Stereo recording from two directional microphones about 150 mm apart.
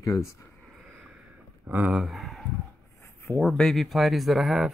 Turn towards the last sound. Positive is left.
turn(degrees=0)  # may be behind; listen again after turning